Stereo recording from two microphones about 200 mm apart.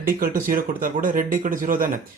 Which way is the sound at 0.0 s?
45° right (ahead or behind).